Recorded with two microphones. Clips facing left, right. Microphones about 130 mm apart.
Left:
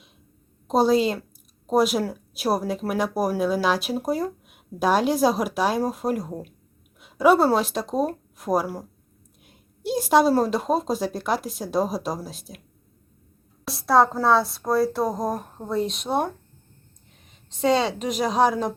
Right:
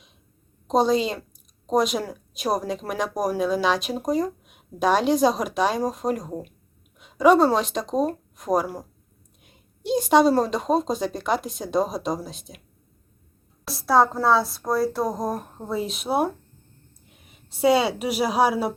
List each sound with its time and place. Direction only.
0.7 s speech: 5° left (ahead or behind)
13.7 s a woman's voice: centre (ahead or behind)